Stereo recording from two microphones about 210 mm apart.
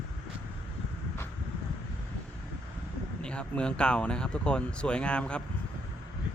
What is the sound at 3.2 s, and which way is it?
Speech, 5° left (ahead or behind).